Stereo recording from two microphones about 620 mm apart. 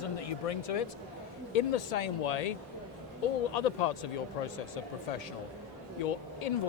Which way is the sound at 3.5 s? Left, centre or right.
Left.